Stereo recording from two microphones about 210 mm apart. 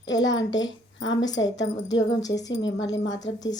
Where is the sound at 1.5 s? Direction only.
60° left (ahead or behind).